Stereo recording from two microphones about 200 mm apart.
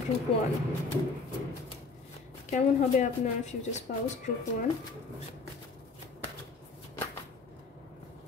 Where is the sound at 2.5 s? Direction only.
35° left (ahead or behind).